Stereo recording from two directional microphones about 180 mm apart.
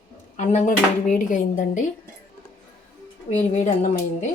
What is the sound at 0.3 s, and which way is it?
A woman's voice, 40° left (ahead or behind).